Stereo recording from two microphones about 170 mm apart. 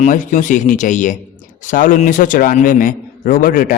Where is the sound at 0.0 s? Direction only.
50° left (ahead or behind).